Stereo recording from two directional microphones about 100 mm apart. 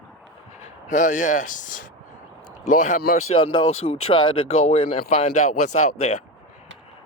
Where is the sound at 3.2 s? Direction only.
80° left.